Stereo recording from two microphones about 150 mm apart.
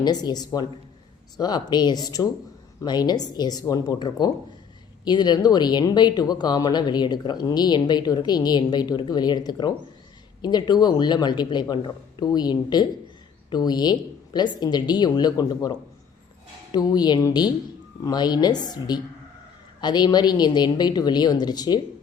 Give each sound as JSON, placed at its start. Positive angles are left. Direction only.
{"t": 0.0, "sound": "speech", "side_deg": 25}